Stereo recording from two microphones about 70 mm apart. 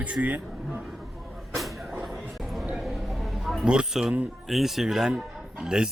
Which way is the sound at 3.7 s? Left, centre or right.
Centre.